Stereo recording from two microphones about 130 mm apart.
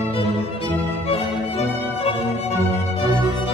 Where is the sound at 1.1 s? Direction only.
45° left (ahead or behind).